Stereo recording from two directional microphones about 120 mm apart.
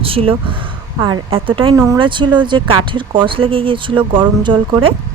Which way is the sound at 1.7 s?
25° right (ahead or behind).